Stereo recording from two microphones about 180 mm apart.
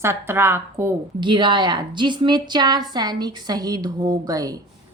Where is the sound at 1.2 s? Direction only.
25° right (ahead or behind).